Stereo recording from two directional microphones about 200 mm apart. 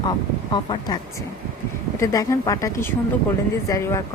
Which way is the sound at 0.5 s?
20° left (ahead or behind).